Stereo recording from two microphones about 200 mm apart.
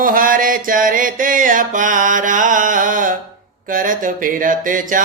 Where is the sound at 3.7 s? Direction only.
40° right (ahead or behind).